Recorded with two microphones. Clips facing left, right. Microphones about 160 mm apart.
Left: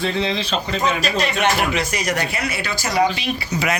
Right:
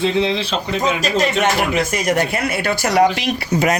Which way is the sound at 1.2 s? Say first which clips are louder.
Right 3 dB; 45° right (ahead or behind).